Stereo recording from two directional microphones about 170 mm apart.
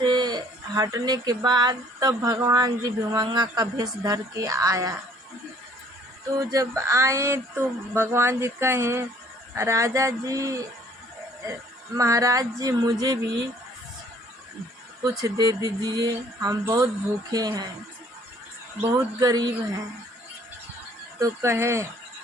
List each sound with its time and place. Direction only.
0.0 s speech: 25° right (ahead or behind)
6.5 s speech: 20° right (ahead or behind)
11.9 s speech: 20° right (ahead or behind)
15.2 s speech: 20° right (ahead or behind)
18.8 s speech: 20° right (ahead or behind)
21.2 s speech: 20° right (ahead or behind)